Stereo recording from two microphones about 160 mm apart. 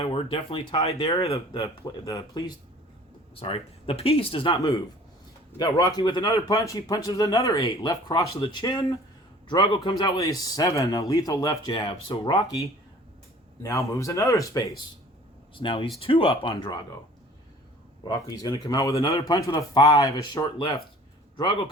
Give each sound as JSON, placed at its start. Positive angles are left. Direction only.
{"t": 0.0, "sound": "speech", "side_deg": 35}
{"t": 1.3, "sound": "a man's voice", "side_deg": 25}
{"t": 3.3, "sound": "speech", "side_deg": 35}
{"t": 5.5, "sound": "a man's voice", "side_deg": 25}
{"t": 13.6, "sound": "a man's voice", "side_deg": 20}
{"t": 15.5, "sound": "speech", "side_deg": 35}
{"t": 18.3, "sound": "a man's voice", "side_deg": 25}